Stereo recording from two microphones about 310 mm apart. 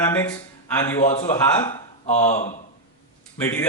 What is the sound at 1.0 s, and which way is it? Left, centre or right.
Speech, left.